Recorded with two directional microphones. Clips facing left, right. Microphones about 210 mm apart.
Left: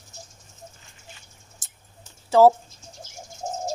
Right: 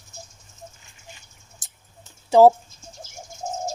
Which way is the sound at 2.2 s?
15° right (ahead or behind).